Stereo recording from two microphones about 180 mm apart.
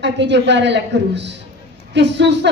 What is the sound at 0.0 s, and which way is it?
A woman's voice, 75° right (ahead or behind).